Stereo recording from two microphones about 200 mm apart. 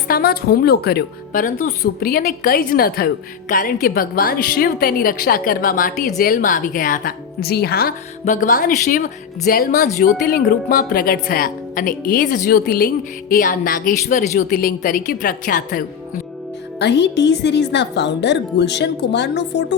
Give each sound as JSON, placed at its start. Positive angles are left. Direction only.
{"t": 0.1, "sound": "speech", "side_deg": 50}
{"t": 16.8, "sound": "a woman's voice", "side_deg": 60}